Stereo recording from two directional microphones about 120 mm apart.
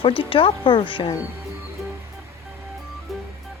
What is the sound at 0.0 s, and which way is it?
Speech, 45° left (ahead or behind).